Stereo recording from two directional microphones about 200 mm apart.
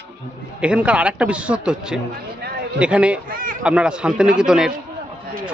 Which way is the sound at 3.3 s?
45° right (ahead or behind).